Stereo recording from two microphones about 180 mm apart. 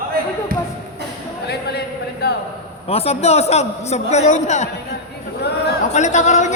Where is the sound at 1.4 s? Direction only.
65° left (ahead or behind).